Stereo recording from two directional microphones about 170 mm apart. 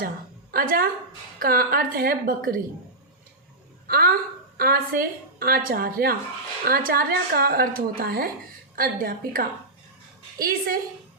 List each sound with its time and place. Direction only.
0.5 s a woman's voice: 55° right (ahead or behind)
3.8 s a woman's voice: 60° right (ahead or behind)